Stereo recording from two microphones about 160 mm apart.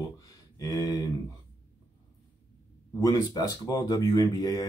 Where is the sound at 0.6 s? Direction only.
25° left (ahead or behind).